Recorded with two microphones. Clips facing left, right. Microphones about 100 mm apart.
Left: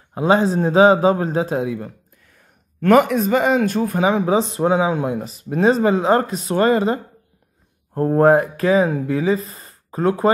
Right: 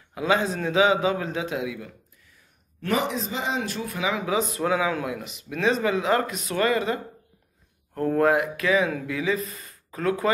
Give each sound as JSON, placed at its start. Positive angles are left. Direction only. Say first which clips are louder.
{"t": 0.1, "sound": "a man's voice", "louder": "left 7 dB", "side_deg": 35}